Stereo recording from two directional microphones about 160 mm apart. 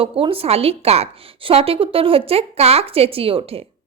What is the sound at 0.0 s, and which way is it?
A woman's voice, 35° right (ahead or behind).